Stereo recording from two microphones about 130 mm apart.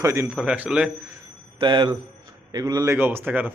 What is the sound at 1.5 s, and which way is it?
A man's voice, 40° right (ahead or behind).